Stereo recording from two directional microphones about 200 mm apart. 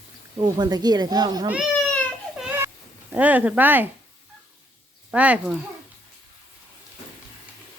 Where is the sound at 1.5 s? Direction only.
5° right (ahead or behind).